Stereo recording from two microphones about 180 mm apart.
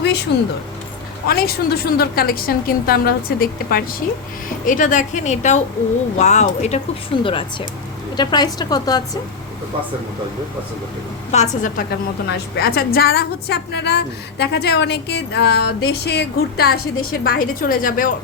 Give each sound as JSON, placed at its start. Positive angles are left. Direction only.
{"t": 0.3, "sound": "speech", "side_deg": 75}
{"t": 1.3, "sound": "a woman's voice", "side_deg": 60}
{"t": 11.3, "sound": "speech", "side_deg": 40}
{"t": 11.8, "sound": "a woman's voice", "side_deg": 60}